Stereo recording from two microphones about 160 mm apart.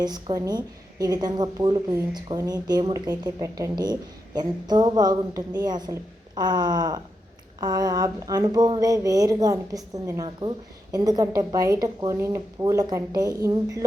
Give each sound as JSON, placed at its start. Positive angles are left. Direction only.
{"t": 0.0, "sound": "a woman's voice", "side_deg": -25}